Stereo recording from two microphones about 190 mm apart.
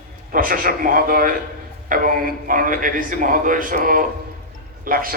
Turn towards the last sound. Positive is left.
turn(degrees=-50)  # may be behind; listen again after turning